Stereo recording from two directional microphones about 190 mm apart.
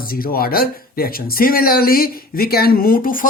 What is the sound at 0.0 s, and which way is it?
Speech, 50° left (ahead or behind).